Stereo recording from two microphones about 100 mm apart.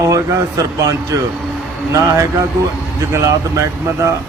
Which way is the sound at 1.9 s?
30° right (ahead or behind).